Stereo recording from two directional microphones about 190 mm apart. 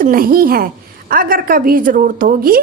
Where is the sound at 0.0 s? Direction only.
50° right (ahead or behind).